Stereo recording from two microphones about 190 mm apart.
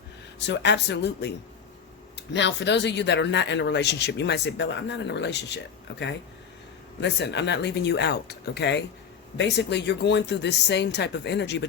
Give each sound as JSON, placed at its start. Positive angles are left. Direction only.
{"t": 0.3, "sound": "speech", "side_deg": 65}
{"t": 7.0, "sound": "speech", "side_deg": 65}